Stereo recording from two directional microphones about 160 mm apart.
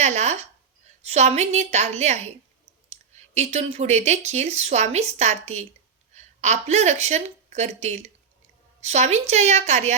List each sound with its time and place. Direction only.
0.0 s a woman's voice: 45° right (ahead or behind)